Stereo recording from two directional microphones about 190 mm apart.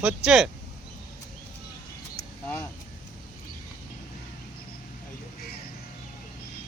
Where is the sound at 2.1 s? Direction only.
10° left (ahead or behind).